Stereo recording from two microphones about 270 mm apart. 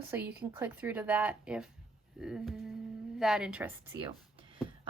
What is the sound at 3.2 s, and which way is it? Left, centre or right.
Speech, centre.